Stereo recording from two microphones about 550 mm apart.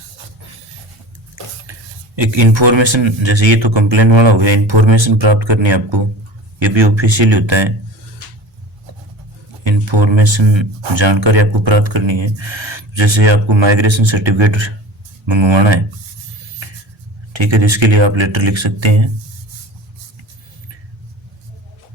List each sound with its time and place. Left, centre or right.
2.1 s speech: right
9.6 s speech: right
17.3 s speech: right